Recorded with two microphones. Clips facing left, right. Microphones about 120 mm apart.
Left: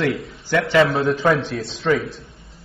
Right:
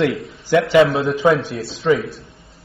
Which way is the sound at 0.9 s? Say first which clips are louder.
Right 2 dB; centre (ahead or behind).